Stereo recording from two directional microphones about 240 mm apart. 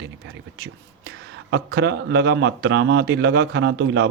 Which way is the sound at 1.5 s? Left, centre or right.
Right.